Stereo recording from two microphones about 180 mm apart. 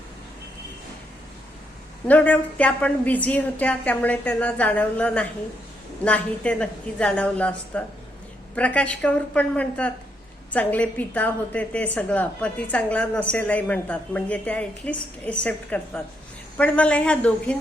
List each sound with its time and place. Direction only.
2.0 s a woman's voice: 10° left (ahead or behind)